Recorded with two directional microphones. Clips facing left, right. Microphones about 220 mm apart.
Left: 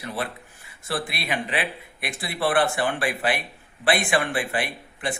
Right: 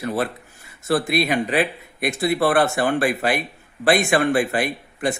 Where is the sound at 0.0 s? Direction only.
45° right (ahead or behind).